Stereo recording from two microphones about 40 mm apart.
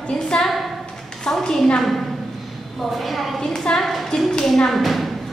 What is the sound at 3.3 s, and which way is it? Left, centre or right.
Speech, centre.